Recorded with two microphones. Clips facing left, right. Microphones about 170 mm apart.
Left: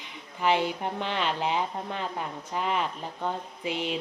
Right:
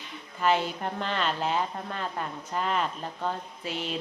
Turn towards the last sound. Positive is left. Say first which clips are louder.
# left 3 dB
turn(degrees=15)  # may be behind; listen again after turning